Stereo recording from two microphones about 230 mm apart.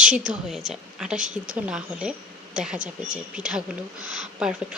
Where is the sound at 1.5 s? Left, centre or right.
Centre.